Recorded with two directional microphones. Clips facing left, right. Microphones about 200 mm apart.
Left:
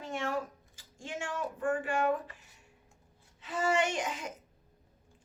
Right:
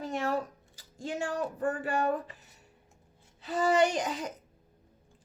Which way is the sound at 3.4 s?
35° right (ahead or behind).